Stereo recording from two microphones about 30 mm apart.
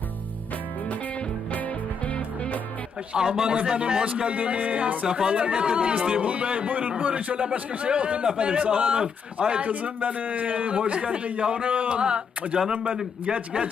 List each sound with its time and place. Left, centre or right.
1.5 s music: left
3.2 s speech: right
4.3 s a man's voice: right
5.0 s speech: right
5.3 s a man's voice: right
8.9 s speech: right
9.6 s a man's voice: right
10.9 s speech: right
11.2 s a man's voice: right
11.9 s a man's voice: right